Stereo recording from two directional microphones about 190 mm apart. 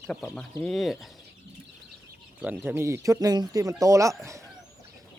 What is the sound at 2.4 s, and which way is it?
Speech, 10° right (ahead or behind).